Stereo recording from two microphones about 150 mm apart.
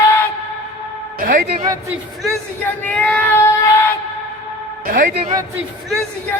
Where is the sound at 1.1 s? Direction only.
65° right (ahead or behind).